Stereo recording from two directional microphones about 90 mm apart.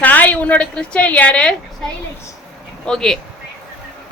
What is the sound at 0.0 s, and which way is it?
A woman's voice, 20° left (ahead or behind).